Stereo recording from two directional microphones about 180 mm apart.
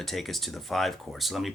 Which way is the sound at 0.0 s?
Centre (ahead or behind).